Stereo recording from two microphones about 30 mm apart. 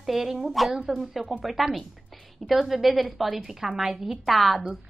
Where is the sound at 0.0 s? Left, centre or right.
Centre.